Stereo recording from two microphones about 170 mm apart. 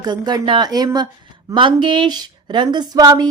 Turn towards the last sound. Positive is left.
turn(degrees=-25)  # may be behind; listen again after turning